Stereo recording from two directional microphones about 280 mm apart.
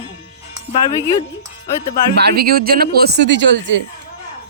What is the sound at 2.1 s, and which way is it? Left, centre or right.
Speech, right.